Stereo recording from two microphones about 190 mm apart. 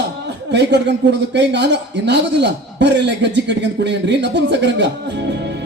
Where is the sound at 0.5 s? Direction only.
65° right (ahead or behind).